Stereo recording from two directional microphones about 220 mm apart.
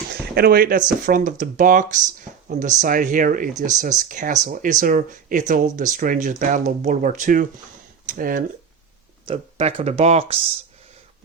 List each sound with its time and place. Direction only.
0.1 s speech: 45° right (ahead or behind)
9.2 s speech: 25° right (ahead or behind)